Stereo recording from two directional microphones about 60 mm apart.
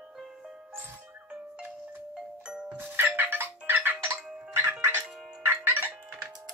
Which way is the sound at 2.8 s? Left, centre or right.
Right.